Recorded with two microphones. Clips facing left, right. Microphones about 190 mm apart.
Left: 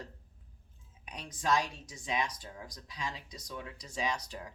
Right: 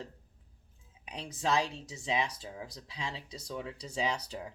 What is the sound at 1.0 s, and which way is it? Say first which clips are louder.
Speech: right 1 dB; 30° right (ahead or behind).